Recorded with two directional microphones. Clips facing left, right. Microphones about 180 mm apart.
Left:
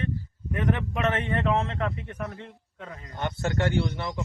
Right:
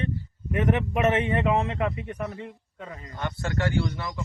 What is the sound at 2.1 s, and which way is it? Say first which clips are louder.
A man's voice: right 3 dB; centre (ahead or behind).